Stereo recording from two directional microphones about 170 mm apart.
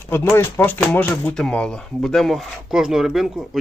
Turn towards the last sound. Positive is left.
turn(degrees=0)  # may be behind; listen again after turning